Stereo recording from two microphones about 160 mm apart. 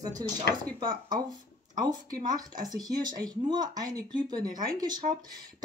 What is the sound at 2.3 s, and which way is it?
Speech, 25° right (ahead or behind).